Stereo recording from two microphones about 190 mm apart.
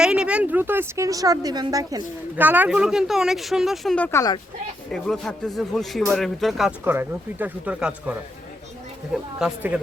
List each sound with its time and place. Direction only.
0.0 s a man's voice: 5° right (ahead or behind); by 4.4 s 15° left (ahead or behind)
4.9 s a man's voice: centre (ahead or behind)